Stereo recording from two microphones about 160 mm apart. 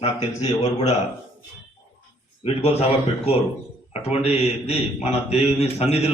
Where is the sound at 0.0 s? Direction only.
40° left (ahead or behind).